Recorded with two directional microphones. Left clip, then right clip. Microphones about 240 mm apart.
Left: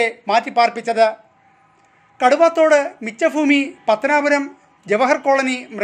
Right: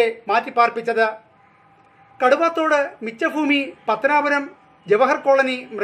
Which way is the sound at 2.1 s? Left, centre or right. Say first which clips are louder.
Left 4 dB; left.